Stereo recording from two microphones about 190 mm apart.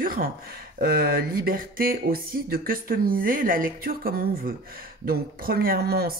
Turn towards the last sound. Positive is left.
turn(degrees=-55)  # may be behind; listen again after turning